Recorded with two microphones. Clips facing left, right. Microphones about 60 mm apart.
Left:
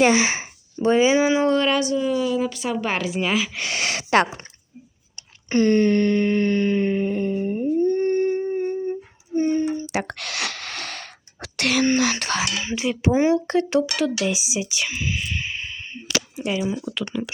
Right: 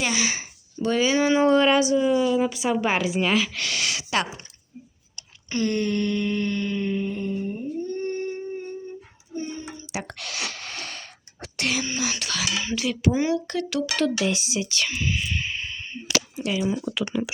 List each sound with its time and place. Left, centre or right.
0.0 s speech: left
1.2 s speech: centre
1.5 s a woman's voice: centre
3.5 s speech: left
5.1 s a sound: left
9.8 s a sound: left
11.9 s speech: left
12.1 s speech: left
12.6 s speech: left
13.9 s speech: centre
16.3 s speech: centre
16.6 s speech: centre